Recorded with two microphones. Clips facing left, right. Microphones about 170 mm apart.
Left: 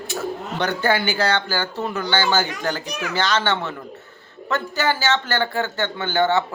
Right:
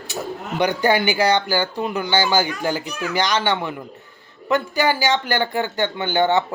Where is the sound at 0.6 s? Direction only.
15° right (ahead or behind).